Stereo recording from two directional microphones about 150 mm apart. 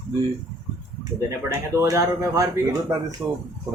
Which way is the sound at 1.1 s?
20° right (ahead or behind).